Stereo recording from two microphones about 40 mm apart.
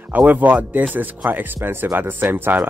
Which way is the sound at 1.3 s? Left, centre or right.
Right.